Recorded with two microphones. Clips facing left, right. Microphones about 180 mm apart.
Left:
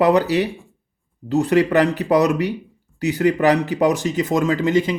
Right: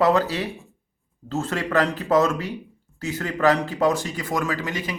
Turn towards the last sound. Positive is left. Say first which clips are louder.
# left 10 dB
turn(degrees=25)  # may be behind; listen again after turning